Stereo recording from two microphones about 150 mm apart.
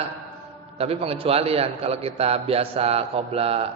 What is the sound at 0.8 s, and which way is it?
A man's voice, 40° right (ahead or behind).